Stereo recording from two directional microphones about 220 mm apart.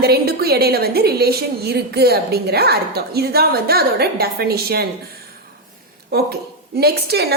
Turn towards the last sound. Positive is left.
turn(degrees=-45)  # may be behind; listen again after turning